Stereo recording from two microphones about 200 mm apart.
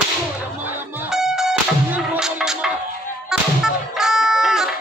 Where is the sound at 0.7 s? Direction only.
10° right (ahead or behind).